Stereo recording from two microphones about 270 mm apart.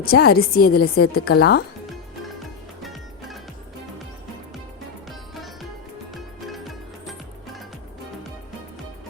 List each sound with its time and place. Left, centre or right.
0.0 s a woman's voice: left
2.8 s music: centre
6.1 s music: centre